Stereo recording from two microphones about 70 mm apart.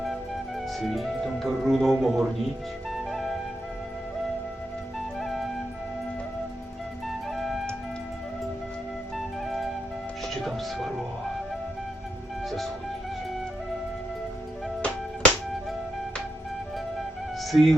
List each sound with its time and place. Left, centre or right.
0.8 s speech: centre
2.9 s flute: centre
4.9 s flute: centre
7.3 s music: centre
9.1 s flute: centre
10.2 s music: centre
14.8 s music: centre
17.5 s speech: centre